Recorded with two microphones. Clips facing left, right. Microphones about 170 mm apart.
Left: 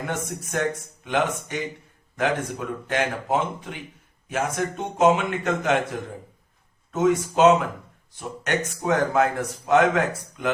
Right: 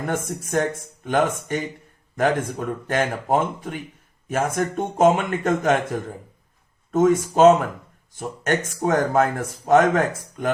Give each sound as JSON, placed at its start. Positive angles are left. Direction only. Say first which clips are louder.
{"t": 0.0, "sound": "speech", "louder": "right 3 dB", "side_deg": -45}